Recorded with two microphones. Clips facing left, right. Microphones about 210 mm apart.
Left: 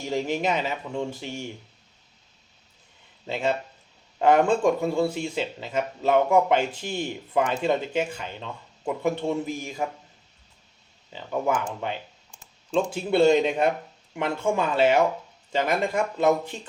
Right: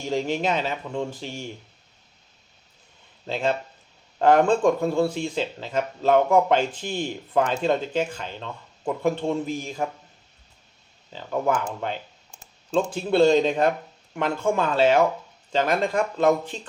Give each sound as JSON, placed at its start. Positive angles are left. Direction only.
{"t": 0.0, "sound": "speech", "side_deg": 10}
{"t": 4.2, "sound": "speech", "side_deg": 10}
{"t": 11.1, "sound": "speech", "side_deg": 15}
{"t": 12.7, "sound": "speech", "side_deg": 10}